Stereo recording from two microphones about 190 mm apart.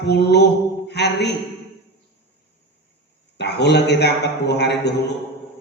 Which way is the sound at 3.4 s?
60° left (ahead or behind).